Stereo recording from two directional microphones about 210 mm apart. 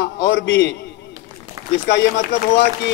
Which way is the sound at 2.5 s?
55° left (ahead or behind).